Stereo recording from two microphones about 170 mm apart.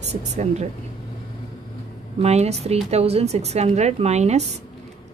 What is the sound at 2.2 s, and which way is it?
Speech, 40° right (ahead or behind).